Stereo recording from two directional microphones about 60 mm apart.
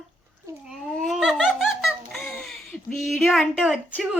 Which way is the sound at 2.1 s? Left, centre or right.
Centre.